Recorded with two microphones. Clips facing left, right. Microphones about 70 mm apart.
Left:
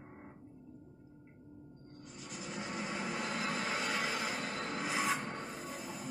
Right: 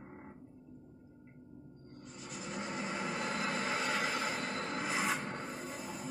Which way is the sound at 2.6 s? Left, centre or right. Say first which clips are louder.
Right 1 dB; centre.